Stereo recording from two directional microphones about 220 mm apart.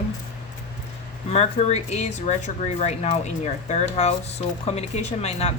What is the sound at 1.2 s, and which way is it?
Speech, 30° left (ahead or behind).